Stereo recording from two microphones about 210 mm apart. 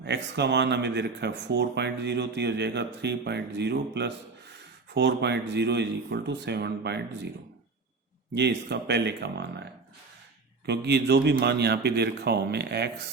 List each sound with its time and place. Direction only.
0.0 s speech: 55° right (ahead or behind)
8.4 s speech: 55° right (ahead or behind)
10.7 s speech: 50° right (ahead or behind)